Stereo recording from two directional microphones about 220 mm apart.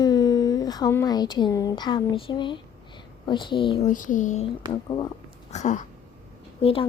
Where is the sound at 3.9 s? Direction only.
35° left (ahead or behind).